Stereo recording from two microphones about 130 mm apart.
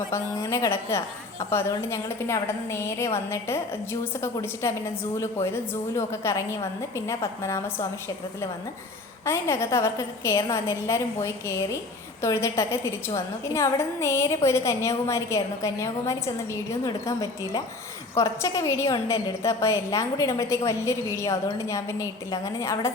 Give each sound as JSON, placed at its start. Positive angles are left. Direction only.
{"t": 0.1, "sound": "a woman's voice", "side_deg": 20}
{"t": 9.2, "sound": "a woman's voice", "side_deg": 20}